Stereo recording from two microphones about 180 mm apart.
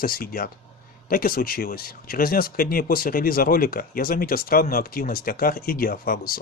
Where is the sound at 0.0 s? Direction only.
55° left (ahead or behind).